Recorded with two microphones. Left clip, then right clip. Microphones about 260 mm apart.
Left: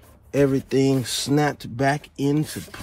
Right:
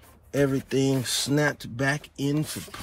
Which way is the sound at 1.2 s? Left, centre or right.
Centre.